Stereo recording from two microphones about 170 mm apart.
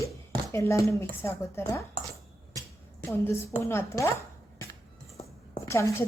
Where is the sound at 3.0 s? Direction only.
15° left (ahead or behind).